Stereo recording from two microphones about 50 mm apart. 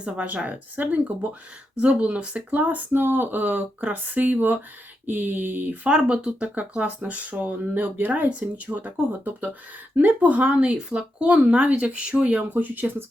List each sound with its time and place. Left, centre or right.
0.0 s speech: right
2.9 s speech: right
5.9 s speech: right
12.5 s speech: right